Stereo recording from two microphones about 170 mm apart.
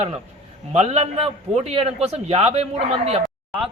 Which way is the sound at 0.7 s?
40° right (ahead or behind).